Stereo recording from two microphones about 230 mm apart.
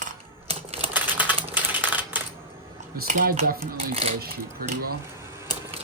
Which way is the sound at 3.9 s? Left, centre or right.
Right.